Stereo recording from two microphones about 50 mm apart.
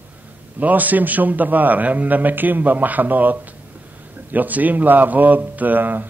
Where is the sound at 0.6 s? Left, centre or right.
Right.